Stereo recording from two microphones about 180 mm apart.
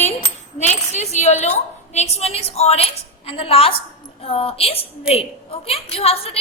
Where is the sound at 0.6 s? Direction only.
40° left (ahead or behind).